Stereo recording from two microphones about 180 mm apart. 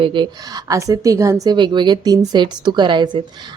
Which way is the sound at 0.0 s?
25° right (ahead or behind).